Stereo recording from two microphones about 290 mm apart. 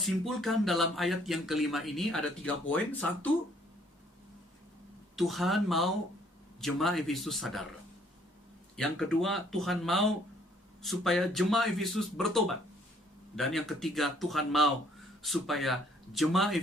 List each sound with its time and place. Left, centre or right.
0.0 s speech: centre
5.1 s speech: centre
8.7 s speech: centre